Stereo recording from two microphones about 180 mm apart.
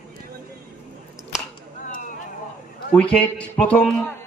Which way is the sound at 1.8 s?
45° left (ahead or behind).